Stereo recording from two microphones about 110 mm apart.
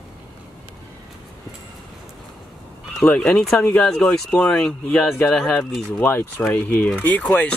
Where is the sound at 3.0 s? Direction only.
5° left (ahead or behind).